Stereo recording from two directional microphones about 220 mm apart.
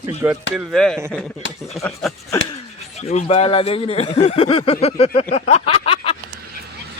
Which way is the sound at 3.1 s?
30° left (ahead or behind).